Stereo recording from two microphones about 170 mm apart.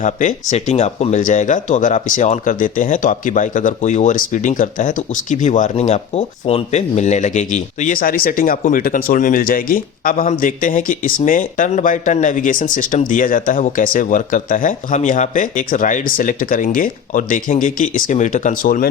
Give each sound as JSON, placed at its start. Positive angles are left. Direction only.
{"t": 0.0, "sound": "speech", "side_deg": 50}